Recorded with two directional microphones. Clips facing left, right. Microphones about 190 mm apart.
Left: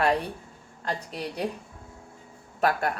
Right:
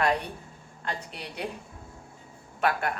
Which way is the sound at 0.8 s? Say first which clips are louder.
Left 4 dB; 40° left (ahead or behind).